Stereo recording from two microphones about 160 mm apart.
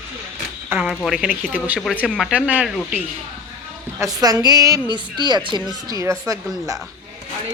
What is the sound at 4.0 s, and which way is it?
A woman's voice, 25° right (ahead or behind).